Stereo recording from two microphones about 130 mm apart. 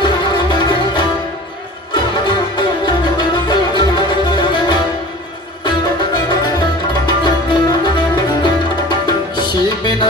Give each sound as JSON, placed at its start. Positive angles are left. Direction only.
{"t": 0.0, "sound": "music", "side_deg": 35}
{"t": 6.2, "sound": "music", "side_deg": 35}